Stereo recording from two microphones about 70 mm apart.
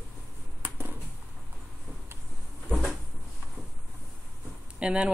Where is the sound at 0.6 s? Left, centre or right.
Right.